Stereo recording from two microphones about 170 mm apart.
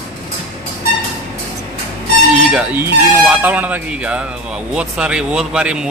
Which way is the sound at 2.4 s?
5° right (ahead or behind).